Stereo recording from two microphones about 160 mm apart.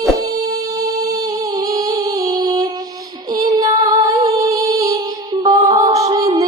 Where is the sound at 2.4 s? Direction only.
25° right (ahead or behind).